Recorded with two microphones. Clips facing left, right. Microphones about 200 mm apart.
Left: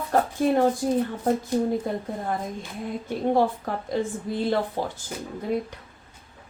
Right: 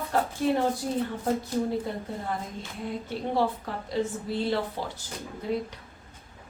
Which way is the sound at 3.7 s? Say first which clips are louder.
Left 3 dB; 50° left (ahead or behind).